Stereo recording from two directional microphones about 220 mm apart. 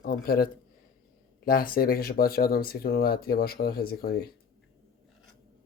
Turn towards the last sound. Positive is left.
turn(degrees=45)  # may be behind; listen again after turning